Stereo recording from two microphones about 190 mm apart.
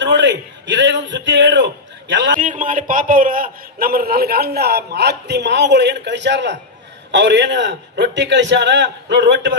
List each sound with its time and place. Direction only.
0.0 s a man's voice: 70° right (ahead or behind)
2.3 s a man's voice: 45° right (ahead or behind); by 9.6 s 70° right (ahead or behind)